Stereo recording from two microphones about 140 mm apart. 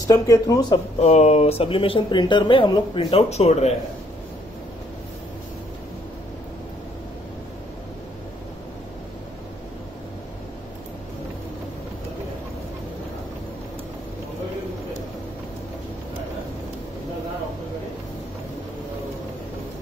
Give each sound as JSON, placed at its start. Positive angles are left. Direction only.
{"t": 0.0, "sound": "speech", "side_deg": 25}
{"t": 0.9, "sound": "speech", "side_deg": 50}